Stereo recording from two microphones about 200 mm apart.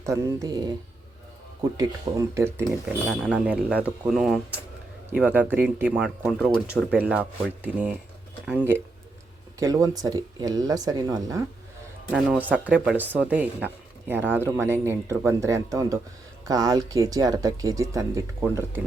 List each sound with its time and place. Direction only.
0.0 s speech: 15° right (ahead or behind)
1.7 s speech: 20° right (ahead or behind)
2.6 s speech: centre (ahead or behind)
9.6 s speech: 20° right (ahead or behind)
12.1 s speech: 5° right (ahead or behind)